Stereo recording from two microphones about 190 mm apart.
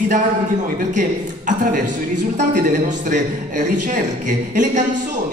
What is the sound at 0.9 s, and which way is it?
A man's voice, 40° right (ahead or behind).